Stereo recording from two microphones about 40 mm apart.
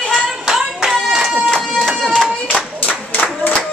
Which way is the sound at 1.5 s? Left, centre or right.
Centre.